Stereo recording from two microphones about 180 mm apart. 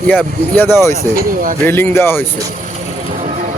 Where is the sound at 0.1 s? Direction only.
10° left (ahead or behind).